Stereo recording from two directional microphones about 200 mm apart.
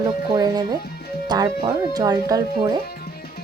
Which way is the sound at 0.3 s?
20° right (ahead or behind).